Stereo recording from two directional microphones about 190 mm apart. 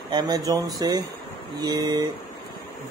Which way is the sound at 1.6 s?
20° right (ahead or behind).